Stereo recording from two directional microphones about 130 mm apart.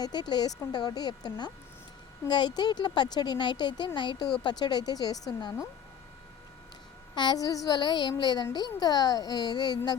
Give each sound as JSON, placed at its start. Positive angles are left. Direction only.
{"t": 0.0, "sound": "speech", "side_deg": 35}
{"t": 7.2, "sound": "speech", "side_deg": 30}